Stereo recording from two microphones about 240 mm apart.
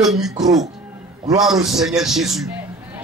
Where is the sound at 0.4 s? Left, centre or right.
Centre.